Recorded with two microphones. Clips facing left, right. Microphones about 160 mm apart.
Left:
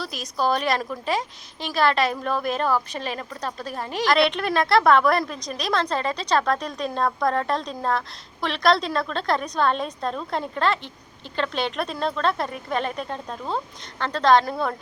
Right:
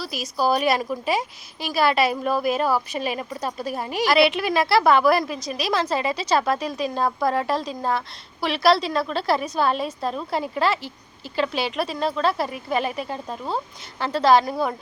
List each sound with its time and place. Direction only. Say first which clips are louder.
0.0 s a woman's voice: right 1 dB; 5° right (ahead or behind)